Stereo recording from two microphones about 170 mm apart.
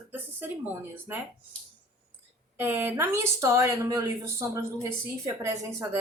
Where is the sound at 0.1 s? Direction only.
10° right (ahead or behind).